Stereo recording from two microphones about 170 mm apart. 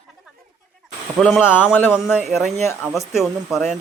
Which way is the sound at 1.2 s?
Centre (ahead or behind).